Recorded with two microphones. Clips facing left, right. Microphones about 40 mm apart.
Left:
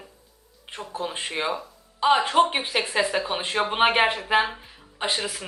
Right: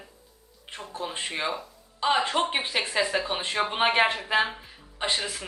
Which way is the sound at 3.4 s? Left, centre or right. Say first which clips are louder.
Left 6 dB; left.